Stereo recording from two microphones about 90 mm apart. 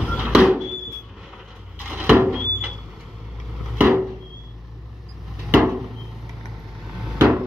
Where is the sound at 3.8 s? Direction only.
20° right (ahead or behind).